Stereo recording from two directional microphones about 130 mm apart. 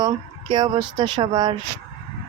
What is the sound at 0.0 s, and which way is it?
Speech, 35° right (ahead or behind).